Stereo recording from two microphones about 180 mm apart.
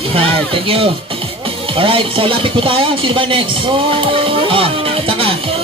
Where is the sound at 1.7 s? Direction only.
30° right (ahead or behind).